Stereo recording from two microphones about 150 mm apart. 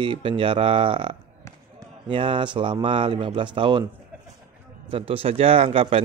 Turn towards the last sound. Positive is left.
turn(degrees=-40)  # may be behind; listen again after turning